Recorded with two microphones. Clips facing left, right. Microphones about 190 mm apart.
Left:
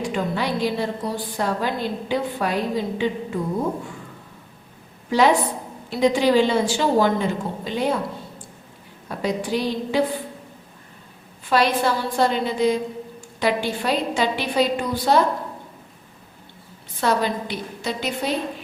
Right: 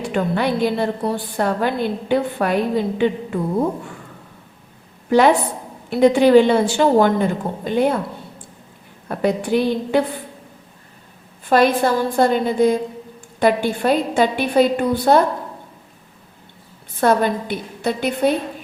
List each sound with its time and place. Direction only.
0.1 s a woman's voice: 55° right (ahead or behind)
5.0 s a woman's voice: 55° right (ahead or behind)
9.0 s a woman's voice: 55° right (ahead or behind)
11.4 s a woman's voice: 50° right (ahead or behind)
17.0 s a woman's voice: 50° right (ahead or behind)